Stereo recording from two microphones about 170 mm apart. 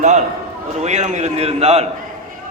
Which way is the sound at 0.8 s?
45° right (ahead or behind).